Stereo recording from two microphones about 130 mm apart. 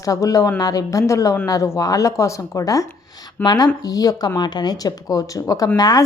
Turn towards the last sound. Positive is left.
turn(degrees=30)  # may be behind; listen again after turning